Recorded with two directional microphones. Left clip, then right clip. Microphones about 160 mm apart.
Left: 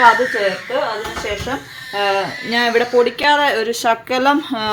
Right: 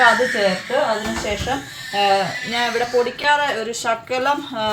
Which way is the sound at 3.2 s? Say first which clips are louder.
Left 4 dB; 80° left.